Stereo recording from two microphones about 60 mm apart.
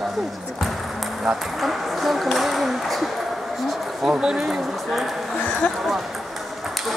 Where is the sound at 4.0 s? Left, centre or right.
Centre.